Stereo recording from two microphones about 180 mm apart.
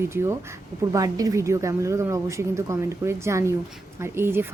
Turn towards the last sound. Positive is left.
turn(degrees=-15)  # may be behind; listen again after turning